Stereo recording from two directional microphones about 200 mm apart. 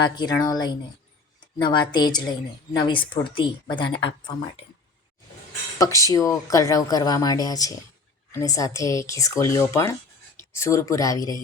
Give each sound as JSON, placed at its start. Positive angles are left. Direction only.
{"t": 0.0, "sound": "a woman's voice", "side_deg": 20}
{"t": 5.8, "sound": "speech", "side_deg": 15}